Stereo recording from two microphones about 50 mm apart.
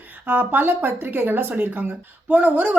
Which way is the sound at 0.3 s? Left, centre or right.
Right.